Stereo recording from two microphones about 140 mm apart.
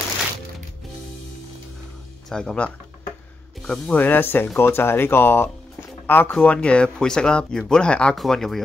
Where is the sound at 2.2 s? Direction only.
5° left (ahead or behind).